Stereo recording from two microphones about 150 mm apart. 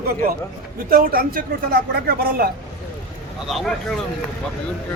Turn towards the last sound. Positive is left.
turn(degrees=5)  # may be behind; listen again after turning